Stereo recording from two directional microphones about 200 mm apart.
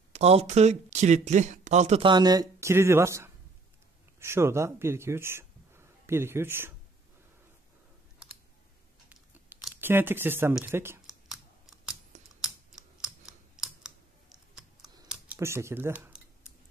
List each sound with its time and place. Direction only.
0.1 s speech: 30° right (ahead or behind); by 6.7 s 10° right (ahead or behind)
9.1 s a sound: 10° right (ahead or behind)
11.2 s computer keyboard: 5° right (ahead or behind)
12.1 s computer keyboard: 35° right (ahead or behind)
12.7 s computer keyboard: 5° right (ahead or behind)
15.0 s a sound: 10° right (ahead or behind)